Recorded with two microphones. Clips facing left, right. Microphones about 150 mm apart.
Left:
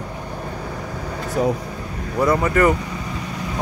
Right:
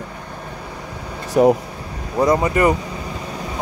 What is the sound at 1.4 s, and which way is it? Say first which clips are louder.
Speech: right 7 dB; 60° right (ahead or behind).